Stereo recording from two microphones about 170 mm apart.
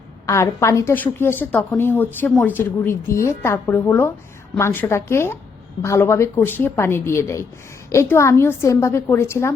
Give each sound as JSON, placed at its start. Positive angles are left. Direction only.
{"t": 0.3, "sound": "a woman's voice", "side_deg": 15}